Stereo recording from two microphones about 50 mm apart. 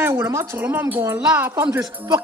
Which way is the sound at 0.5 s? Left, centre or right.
Right.